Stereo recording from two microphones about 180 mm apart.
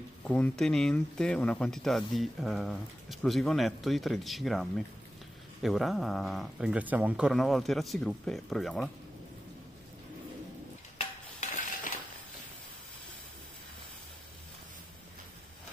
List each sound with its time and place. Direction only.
0.2 s speech: 5° left (ahead or behind)
11.0 s dishes: 45° left (ahead or behind)